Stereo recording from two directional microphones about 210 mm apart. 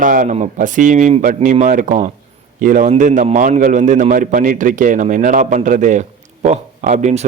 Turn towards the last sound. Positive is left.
turn(degrees=-35)  # may be behind; listen again after turning